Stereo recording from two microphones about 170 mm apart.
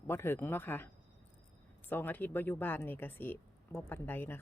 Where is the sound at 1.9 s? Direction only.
10° left (ahead or behind).